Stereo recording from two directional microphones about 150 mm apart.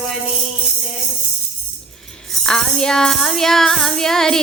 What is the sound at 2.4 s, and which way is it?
Music, 5° left (ahead or behind).